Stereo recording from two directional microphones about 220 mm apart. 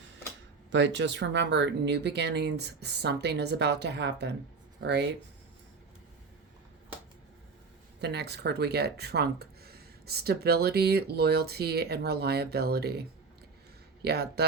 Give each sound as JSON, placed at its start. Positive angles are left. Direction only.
{"t": 0.7, "sound": "speech", "side_deg": -55}
{"t": 8.0, "sound": "speech", "side_deg": -50}